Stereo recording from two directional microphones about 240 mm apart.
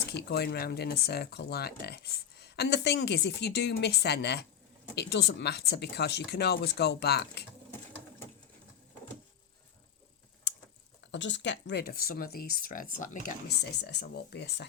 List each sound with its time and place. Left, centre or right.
0.1 s speech: left
11.1 s speech: left